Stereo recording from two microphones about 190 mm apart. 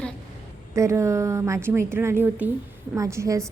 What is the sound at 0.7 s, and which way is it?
Speech, 15° right (ahead or behind).